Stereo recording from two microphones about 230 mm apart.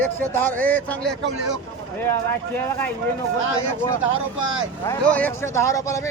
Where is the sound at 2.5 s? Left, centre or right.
Centre.